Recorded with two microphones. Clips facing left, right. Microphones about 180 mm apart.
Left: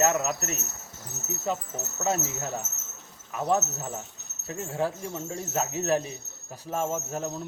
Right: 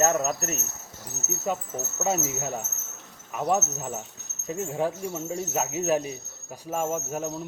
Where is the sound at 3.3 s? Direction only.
15° right (ahead or behind).